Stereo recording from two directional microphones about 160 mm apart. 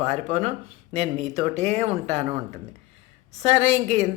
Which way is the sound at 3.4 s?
40° right (ahead or behind).